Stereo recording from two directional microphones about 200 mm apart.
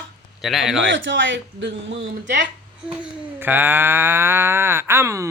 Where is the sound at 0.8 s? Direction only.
65° right (ahead or behind).